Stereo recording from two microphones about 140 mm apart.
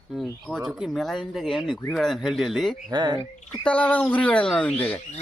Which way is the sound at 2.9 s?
30° right (ahead or behind).